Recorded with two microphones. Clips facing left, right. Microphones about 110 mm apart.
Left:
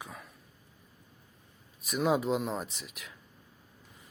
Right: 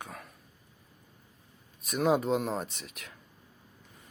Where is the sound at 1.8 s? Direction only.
Centre (ahead or behind).